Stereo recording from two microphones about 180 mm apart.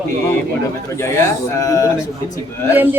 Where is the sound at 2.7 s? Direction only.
10° right (ahead or behind).